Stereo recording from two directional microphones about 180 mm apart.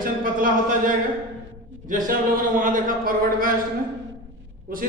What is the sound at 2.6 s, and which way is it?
Speech, 50° right (ahead or behind).